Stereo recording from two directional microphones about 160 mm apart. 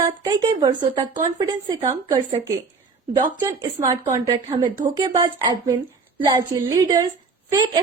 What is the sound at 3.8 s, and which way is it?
A woman's voice, 20° right (ahead or behind).